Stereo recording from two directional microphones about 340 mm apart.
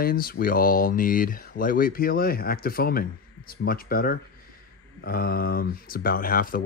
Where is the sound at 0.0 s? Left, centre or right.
Left.